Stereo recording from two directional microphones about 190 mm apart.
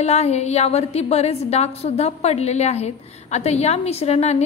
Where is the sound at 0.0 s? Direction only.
35° left (ahead or behind).